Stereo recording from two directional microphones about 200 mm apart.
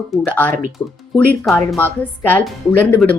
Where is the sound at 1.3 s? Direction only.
Centre (ahead or behind).